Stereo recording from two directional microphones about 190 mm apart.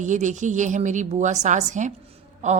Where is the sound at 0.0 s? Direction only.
40° right (ahead or behind).